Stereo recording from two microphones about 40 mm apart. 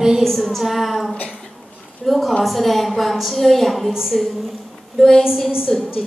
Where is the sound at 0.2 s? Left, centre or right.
Centre.